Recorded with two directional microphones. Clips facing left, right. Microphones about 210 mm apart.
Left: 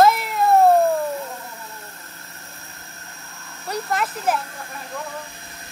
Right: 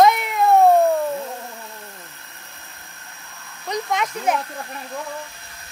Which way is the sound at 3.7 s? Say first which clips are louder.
Right 1 dB; 5° left (ahead or behind).